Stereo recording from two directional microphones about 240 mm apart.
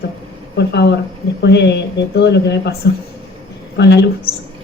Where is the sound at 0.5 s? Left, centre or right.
Left.